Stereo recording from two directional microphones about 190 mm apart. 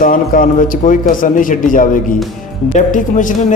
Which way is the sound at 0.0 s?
45° left (ahead or behind).